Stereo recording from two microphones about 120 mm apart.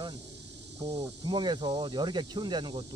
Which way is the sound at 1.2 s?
40° right (ahead or behind).